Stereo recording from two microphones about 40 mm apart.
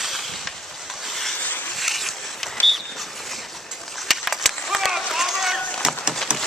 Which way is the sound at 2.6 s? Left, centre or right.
Left.